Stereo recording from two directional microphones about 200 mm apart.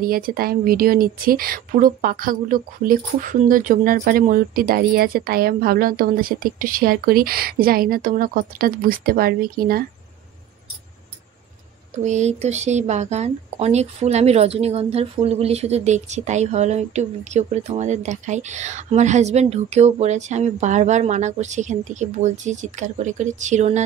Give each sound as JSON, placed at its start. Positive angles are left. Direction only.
{"t": 0.0, "sound": "speech", "side_deg": -45}
{"t": 12.0, "sound": "speech", "side_deg": -35}